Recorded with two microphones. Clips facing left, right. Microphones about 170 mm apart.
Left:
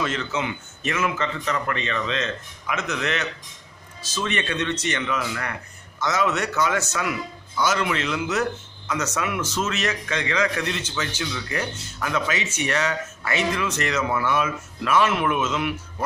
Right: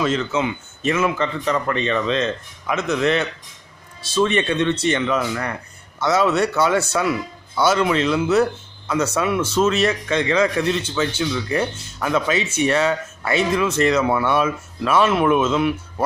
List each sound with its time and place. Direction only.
0.0 s speech: 25° right (ahead or behind)